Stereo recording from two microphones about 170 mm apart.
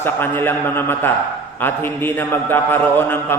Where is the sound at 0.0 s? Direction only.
15° left (ahead or behind).